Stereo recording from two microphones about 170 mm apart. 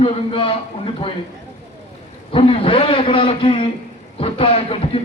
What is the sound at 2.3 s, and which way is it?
A man's voice, 30° left (ahead or behind).